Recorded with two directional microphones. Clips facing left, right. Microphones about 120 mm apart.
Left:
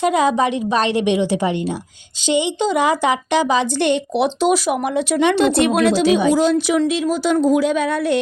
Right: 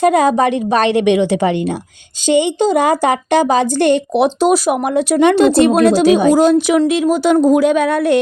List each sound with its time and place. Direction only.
0.0 s a woman's voice: 50° right (ahead or behind); by 1.5 s 65° right (ahead or behind)
2.2 s a woman's voice: 50° right (ahead or behind)